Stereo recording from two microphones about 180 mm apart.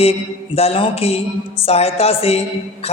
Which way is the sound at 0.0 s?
35° left (ahead or behind).